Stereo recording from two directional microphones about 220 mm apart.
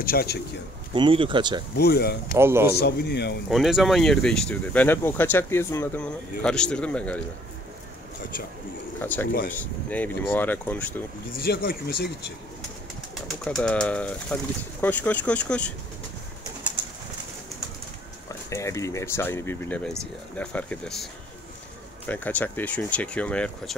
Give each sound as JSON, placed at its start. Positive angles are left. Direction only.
{"t": 0.0, "sound": "speech", "side_deg": 45}
{"t": 0.9, "sound": "speech", "side_deg": -25}
{"t": 1.8, "sound": "speech", "side_deg": 45}
{"t": 2.3, "sound": "a man's voice", "side_deg": -10}
{"t": 2.7, "sound": "speech", "side_deg": 45}
{"t": 3.4, "sound": "speech", "side_deg": 0}
{"t": 9.0, "sound": "speech", "side_deg": 10}
{"t": 11.3, "sound": "speech", "side_deg": 45}
{"t": 13.1, "sound": "speech", "side_deg": 0}
{"t": 18.5, "sound": "speech", "side_deg": 15}